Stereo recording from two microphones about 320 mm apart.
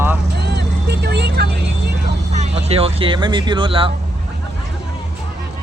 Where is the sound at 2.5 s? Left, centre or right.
Centre.